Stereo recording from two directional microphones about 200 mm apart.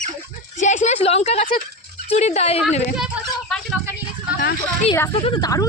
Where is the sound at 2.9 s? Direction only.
5° right (ahead or behind).